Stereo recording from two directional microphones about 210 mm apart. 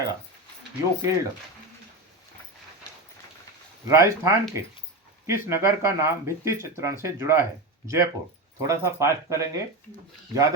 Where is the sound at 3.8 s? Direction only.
15° right (ahead or behind).